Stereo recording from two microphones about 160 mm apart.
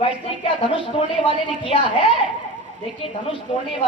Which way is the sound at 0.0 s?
35° left (ahead or behind).